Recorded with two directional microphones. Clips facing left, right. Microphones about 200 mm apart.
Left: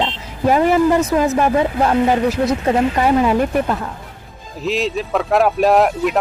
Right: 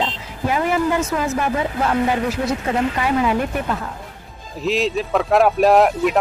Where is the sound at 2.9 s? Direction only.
40° left (ahead or behind).